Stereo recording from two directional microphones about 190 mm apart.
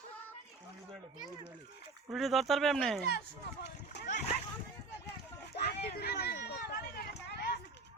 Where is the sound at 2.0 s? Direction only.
Centre (ahead or behind).